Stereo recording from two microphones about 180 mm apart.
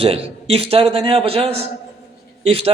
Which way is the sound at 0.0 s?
35° right (ahead or behind).